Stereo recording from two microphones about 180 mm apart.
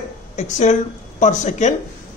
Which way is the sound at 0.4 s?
40° left (ahead or behind).